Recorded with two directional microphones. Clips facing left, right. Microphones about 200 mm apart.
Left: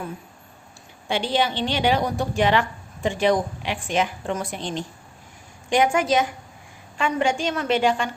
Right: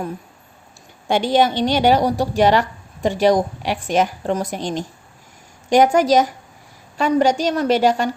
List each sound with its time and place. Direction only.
1.0 s a woman's voice: 45° right (ahead or behind)